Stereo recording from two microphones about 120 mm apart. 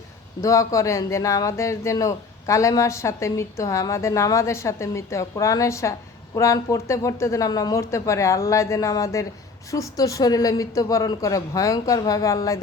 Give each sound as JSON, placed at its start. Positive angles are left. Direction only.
{"t": 0.4, "sound": "speech", "side_deg": 25}